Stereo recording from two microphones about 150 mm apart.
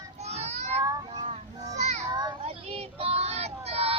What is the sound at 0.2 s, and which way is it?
Child singing, 45° right (ahead or behind).